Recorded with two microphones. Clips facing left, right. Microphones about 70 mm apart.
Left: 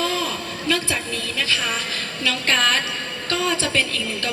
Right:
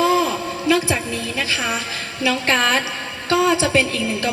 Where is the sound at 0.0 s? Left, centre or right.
Centre.